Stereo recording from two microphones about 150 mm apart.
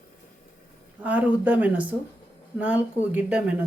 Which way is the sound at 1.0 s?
10° right (ahead or behind).